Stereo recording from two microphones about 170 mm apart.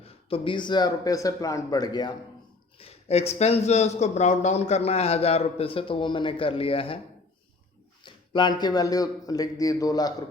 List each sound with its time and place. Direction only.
0.0 s speech: 35° left (ahead or behind)
2.7 s speech: 35° left (ahead or behind)
8.0 s speech: 30° left (ahead or behind)